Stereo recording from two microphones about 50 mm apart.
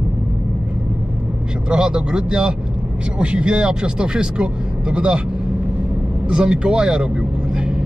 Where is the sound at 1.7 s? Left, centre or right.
Centre.